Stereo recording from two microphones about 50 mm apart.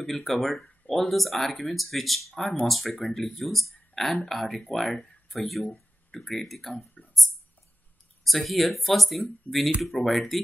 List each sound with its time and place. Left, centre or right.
0.0 s speech: centre
7.0 s a sound: left
8.2 s speech: centre